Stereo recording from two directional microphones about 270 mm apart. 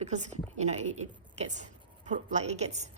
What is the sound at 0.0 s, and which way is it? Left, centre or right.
A woman's voice, right.